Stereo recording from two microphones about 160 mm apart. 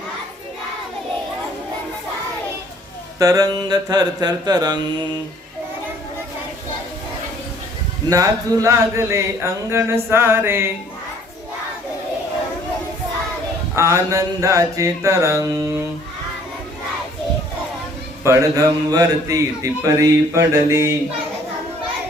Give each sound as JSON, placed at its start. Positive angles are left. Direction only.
{"t": 3.2, "sound": "speech", "side_deg": -20}
{"t": 8.1, "sound": "speech", "side_deg": -20}
{"t": 13.7, "sound": "speech", "side_deg": -20}
{"t": 18.2, "sound": "speech", "side_deg": -20}